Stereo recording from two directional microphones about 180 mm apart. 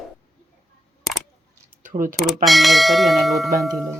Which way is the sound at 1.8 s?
45° right (ahead or behind).